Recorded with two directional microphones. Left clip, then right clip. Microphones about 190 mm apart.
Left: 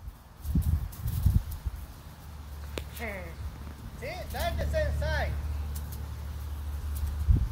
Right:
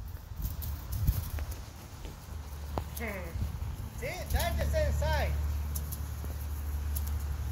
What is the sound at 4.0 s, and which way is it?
Speech, 60° right (ahead or behind).